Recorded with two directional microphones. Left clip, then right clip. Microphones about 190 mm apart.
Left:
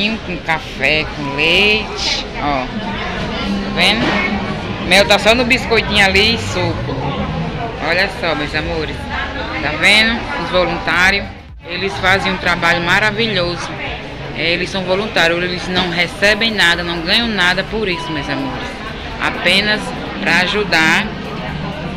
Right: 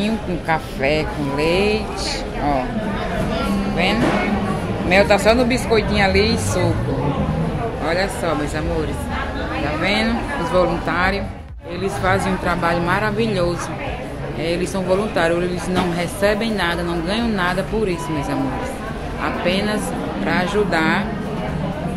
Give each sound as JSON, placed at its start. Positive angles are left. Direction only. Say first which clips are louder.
{"t": 0.0, "sound": "speech", "louder": "left 4 dB", "side_deg": -20}
{"t": 3.7, "sound": "music", "louder": "left 7 dB", "side_deg": -10}
{"t": 4.8, "sound": "speech", "louder": "left 4 dB", "side_deg": -10}
{"t": 7.8, "sound": "speech", "louder": "left 5 dB", "side_deg": -10}
{"t": 9.8, "sound": "speech", "louder": "left 11 dB", "side_deg": -10}
{"t": 19.2, "sound": "speech", "louder": "left 7 dB", "side_deg": -10}